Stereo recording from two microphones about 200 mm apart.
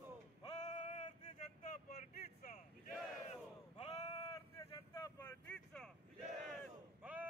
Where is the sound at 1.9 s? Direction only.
45° left (ahead or behind).